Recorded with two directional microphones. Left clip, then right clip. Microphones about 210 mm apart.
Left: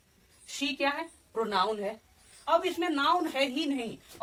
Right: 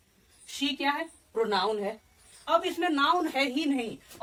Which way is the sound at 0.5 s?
Centre (ahead or behind).